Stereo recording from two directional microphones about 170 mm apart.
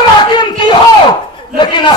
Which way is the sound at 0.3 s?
25° left (ahead or behind).